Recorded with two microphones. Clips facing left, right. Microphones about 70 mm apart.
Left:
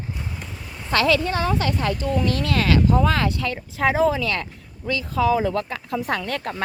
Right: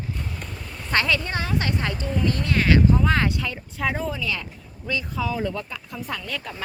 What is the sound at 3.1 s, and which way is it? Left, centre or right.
Speech, left.